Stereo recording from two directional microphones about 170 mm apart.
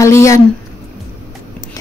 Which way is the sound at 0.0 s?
15° left (ahead or behind).